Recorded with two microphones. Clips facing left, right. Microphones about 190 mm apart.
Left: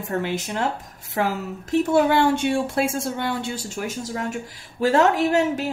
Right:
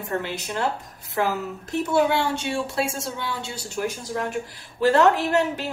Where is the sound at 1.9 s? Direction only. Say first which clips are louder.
Left 2 dB; 55° left (ahead or behind).